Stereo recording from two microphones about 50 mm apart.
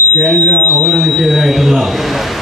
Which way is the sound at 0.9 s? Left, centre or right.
Centre.